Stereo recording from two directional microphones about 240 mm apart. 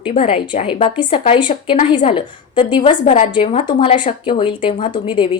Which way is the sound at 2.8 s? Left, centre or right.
Left.